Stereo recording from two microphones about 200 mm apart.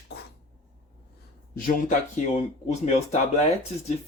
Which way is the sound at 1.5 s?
40° left (ahead or behind).